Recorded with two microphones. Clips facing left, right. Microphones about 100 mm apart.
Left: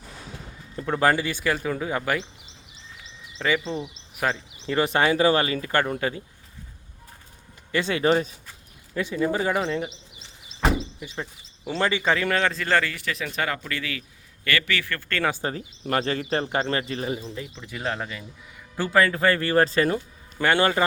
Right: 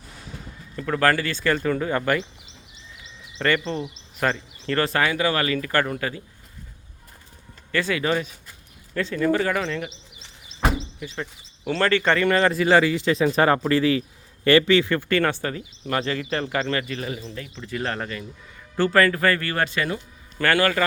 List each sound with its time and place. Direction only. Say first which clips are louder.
0.8 s speech: right 1 dB; 20° left (ahead or behind)
3.3 s speech: right 2 dB; 5° left (ahead or behind); by 6.2 s 25° left (ahead or behind)
7.7 s speech: left 2 dB; 20° left (ahead or behind)
9.0 s speech: right 3 dB; 15° left (ahead or behind)
11.0 s speech: right 2 dB; 15° left (ahead or behind)
12.1 s a man's voice: right 4 dB; centre (ahead or behind); by 15.0 s 20° right (ahead or behind)
15.4 s speech: even; 25° left (ahead or behind)
15.8 s speech: left 1 dB; 35° left (ahead or behind)
17.2 s speech: even; 15° left (ahead or behind); by 20.0 s 35° left (ahead or behind)
20.4 s speech: even; 20° left (ahead or behind)